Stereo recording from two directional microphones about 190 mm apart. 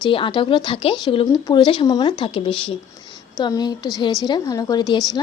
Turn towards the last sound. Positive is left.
turn(degrees=20)  # may be behind; listen again after turning